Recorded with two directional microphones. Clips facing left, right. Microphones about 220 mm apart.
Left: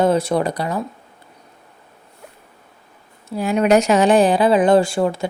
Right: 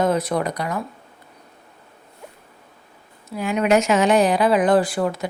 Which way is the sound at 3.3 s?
35° left (ahead or behind).